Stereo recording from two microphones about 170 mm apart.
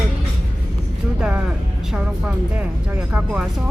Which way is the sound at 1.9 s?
5° right (ahead or behind).